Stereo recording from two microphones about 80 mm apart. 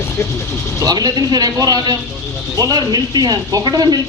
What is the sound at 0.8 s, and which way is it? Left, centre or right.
Speech, right.